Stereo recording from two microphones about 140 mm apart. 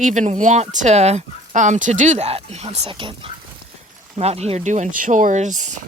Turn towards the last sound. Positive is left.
turn(degrees=-60)  # may be behind; listen again after turning